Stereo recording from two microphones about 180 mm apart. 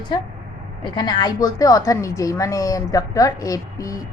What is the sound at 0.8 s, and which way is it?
A woman's voice, 25° left (ahead or behind).